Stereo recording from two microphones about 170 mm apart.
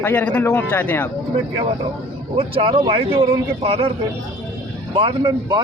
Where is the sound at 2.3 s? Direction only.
30° right (ahead or behind).